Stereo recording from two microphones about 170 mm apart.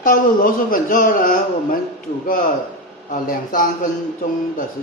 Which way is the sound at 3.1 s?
55° left (ahead or behind).